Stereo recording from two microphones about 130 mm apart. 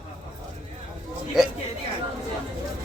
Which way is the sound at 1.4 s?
5° right (ahead or behind).